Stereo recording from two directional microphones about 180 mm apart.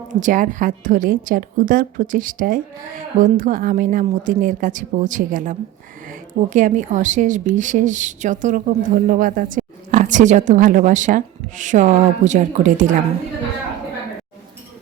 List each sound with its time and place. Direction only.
0.1 s speech: 45° right (ahead or behind)